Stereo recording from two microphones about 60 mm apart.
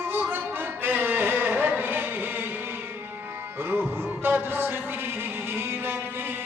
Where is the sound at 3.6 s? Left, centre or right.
Right.